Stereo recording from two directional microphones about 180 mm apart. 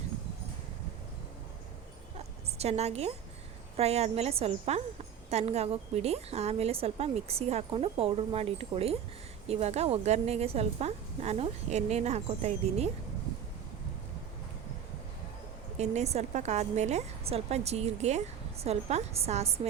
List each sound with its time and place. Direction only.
2.1 s a sound: 35° right (ahead or behind)
3.8 s a woman's voice: 35° right (ahead or behind)
15.8 s a woman's voice: 40° right (ahead or behind)